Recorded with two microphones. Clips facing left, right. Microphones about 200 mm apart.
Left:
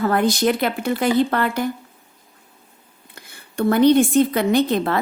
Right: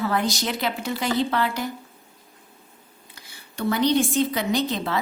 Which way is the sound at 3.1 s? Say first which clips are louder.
Left 10 dB; 55° left (ahead or behind).